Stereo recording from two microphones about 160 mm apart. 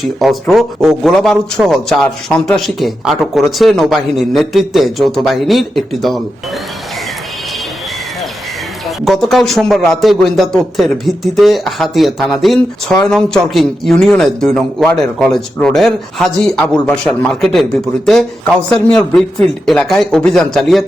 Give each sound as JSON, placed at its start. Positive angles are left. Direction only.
{"t": 0.2, "sound": "speech", "side_deg": 0}
{"t": 9.0, "sound": "speech", "side_deg": 0}